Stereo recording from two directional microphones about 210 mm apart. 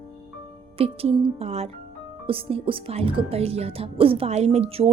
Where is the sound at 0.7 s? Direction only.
30° right (ahead or behind).